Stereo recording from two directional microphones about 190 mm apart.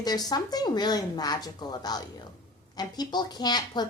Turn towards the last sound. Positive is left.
turn(degrees=20)  # may be behind; listen again after turning